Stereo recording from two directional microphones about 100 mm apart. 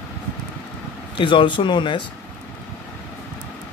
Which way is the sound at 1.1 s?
55° left (ahead or behind).